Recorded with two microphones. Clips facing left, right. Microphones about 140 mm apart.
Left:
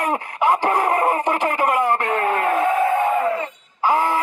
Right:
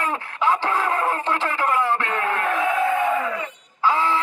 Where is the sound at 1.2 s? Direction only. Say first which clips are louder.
Left 3 dB; 15° left (ahead or behind).